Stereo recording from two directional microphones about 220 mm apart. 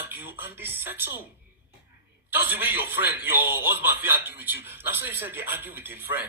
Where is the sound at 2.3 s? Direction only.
10° right (ahead or behind).